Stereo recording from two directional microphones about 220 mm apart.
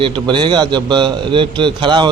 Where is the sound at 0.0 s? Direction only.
20° right (ahead or behind).